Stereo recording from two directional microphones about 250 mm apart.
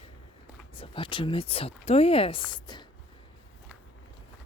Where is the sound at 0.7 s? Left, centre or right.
Left.